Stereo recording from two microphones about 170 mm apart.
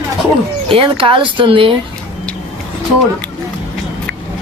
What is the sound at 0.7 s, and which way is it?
Speech, 30° right (ahead or behind).